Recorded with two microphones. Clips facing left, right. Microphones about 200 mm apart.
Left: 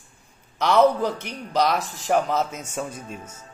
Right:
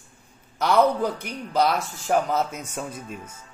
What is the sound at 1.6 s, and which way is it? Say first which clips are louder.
Speech: even; 10° right (ahead or behind).